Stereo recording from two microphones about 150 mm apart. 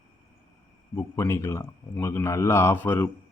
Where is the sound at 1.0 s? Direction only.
20° left (ahead or behind).